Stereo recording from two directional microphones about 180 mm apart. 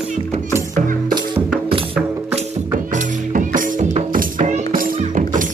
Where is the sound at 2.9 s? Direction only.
45° right (ahead or behind).